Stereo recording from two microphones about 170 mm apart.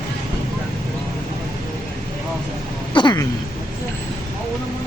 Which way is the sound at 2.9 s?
25° left (ahead or behind).